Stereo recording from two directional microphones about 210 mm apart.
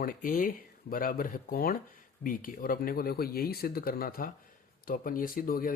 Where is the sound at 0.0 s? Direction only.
40° left (ahead or behind).